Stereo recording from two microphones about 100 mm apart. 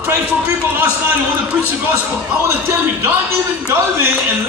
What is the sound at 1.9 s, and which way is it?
A man's voice, 25° right (ahead or behind).